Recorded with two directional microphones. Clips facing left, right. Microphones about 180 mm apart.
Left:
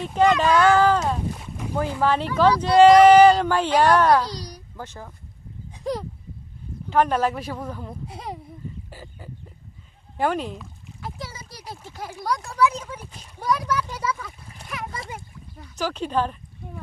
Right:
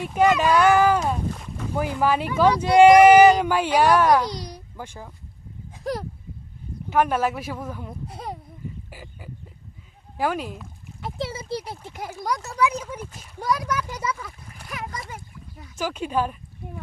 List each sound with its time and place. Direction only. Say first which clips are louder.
0.0 s speech: even; 10° right (ahead or behind)
1.4 s boat: even; 15° left (ahead or behind)
1.7 s speech: even; 10° right (ahead or behind)
4.8 s speech: left 1 dB; 10° right (ahead or behind)
8.9 s dog: left 1 dB; 10° right (ahead or behind)
10.2 s speech: left 2 dB; 5° right (ahead or behind)
11.0 s speech: right 6 dB; 25° right (ahead or behind)
14.6 s a sound: left 1 dB; 25° left (ahead or behind)
15.6 s speech: left 1 dB; 10° right (ahead or behind)